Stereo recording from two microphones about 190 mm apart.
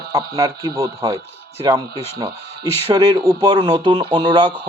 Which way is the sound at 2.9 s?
20° right (ahead or behind).